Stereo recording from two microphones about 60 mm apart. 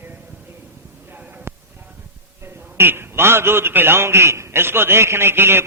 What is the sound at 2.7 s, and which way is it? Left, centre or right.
A man's voice, right.